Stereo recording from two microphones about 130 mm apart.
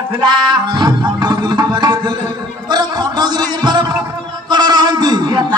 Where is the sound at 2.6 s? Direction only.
30° right (ahead or behind).